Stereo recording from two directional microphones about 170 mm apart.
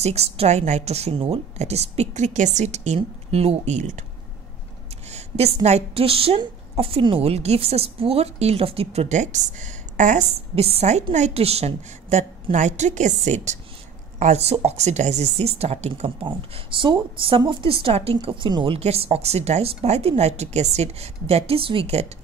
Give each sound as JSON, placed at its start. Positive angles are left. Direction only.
{"t": 0.0, "sound": "a woman's voice", "side_deg": -40}
{"t": 5.1, "sound": "a woman's voice", "side_deg": -40}